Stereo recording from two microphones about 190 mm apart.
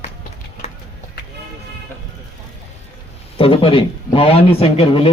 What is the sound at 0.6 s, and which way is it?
Clip-clop, 35° left (ahead or behind).